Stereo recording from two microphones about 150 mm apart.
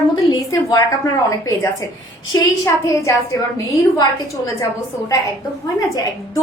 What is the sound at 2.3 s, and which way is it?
Speech, 25° left (ahead or behind).